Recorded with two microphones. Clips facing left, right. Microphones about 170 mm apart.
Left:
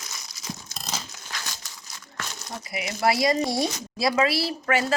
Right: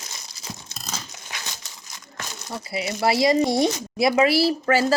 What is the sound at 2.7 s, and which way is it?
Speech, 25° right (ahead or behind).